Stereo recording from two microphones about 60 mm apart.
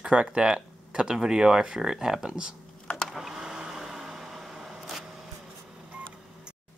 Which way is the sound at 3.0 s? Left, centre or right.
Centre.